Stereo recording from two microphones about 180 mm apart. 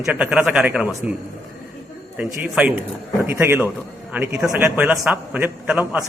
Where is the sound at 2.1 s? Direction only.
10° right (ahead or behind).